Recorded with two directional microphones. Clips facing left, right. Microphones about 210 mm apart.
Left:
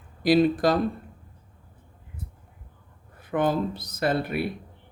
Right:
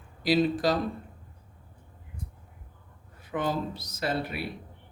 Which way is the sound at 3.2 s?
55° left (ahead or behind).